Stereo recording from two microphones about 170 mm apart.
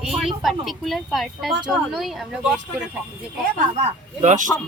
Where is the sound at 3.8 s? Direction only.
45° right (ahead or behind).